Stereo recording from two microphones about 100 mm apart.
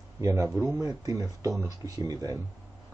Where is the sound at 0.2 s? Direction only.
30° right (ahead or behind).